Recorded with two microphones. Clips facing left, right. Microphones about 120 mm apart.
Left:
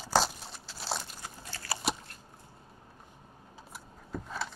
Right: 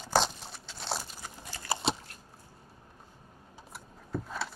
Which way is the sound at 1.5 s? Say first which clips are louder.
Right 3 dB; 20° right (ahead or behind).